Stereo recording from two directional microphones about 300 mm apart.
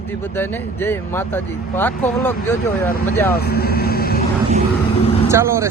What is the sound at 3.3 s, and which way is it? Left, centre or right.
Vehicle, left.